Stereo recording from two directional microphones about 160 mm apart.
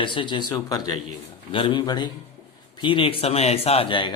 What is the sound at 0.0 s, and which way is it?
A man's voice, 30° left (ahead or behind).